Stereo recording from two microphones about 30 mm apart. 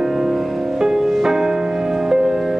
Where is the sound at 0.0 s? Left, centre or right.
Centre.